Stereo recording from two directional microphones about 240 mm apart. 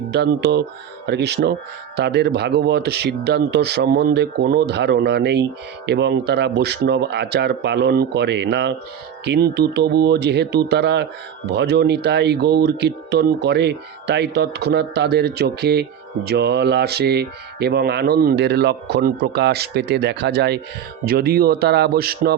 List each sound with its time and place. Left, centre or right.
0.1 s speech: right